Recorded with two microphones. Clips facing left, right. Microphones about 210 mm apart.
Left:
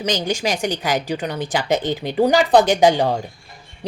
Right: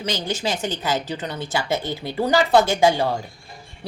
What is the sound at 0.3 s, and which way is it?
Speech, 15° left (ahead or behind).